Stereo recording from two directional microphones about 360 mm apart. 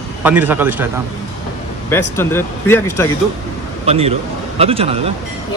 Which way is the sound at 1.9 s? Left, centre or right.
Centre.